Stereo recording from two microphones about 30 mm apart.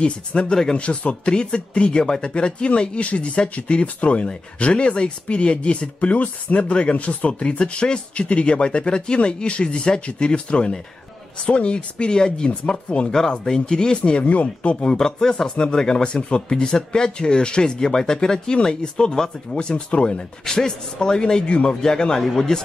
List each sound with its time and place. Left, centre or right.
0.0 s speech: left
1.3 s speech: left
3.8 s speech: left
6.6 s speech: left
12.9 s speech: left
13.4 s speech: centre
14.2 s speech: left
15.0 s speech: centre; by 20.2 s left
20.4 s speech: left